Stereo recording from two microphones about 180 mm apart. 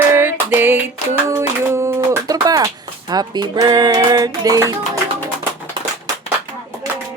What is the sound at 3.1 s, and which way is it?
Music, 20° right (ahead or behind).